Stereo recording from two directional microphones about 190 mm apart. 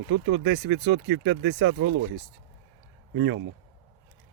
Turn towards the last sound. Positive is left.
turn(degrees=-80)